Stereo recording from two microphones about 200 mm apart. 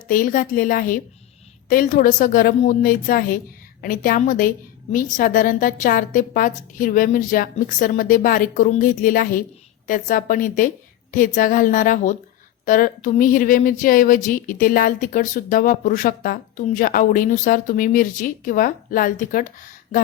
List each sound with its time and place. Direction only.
0.1 s a woman's voice: 40° left (ahead or behind)